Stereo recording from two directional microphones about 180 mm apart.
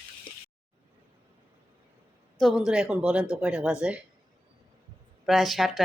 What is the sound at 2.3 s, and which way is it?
Speech, centre (ahead or behind).